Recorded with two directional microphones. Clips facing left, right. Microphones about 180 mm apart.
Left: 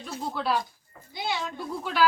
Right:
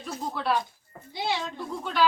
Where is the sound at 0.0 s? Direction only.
Centre (ahead or behind).